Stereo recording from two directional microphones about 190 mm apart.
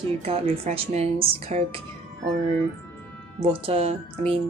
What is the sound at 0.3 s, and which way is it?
Speech, 30° right (ahead or behind).